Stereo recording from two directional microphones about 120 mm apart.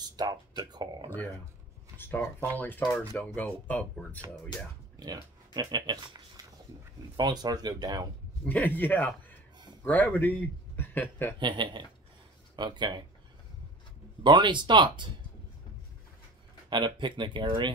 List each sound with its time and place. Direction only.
0.0 s speech: 35° right (ahead or behind)
2.0 s speech: 15° left (ahead or behind)
4.9 s speech: 35° right (ahead or behind)
8.5 s a man's voice: 15° left (ahead or behind)
11.3 s speech: 40° right (ahead or behind)
14.2 s speech: 40° right (ahead or behind)
16.6 s speech: 40° right (ahead or behind)